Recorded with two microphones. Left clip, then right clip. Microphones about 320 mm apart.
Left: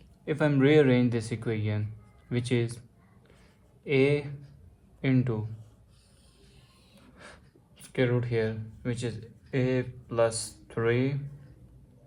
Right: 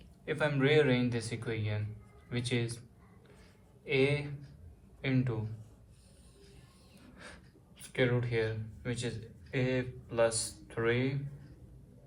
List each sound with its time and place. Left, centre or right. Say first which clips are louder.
0.3 s speech: left 5 dB; left
3.8 s a man's voice: left 5 dB; left
7.8 s speech: left 3 dB; left